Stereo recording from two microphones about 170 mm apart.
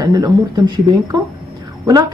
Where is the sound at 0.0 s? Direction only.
20° right (ahead or behind).